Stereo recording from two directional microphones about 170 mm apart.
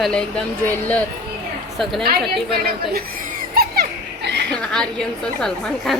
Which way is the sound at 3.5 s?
65° right (ahead or behind).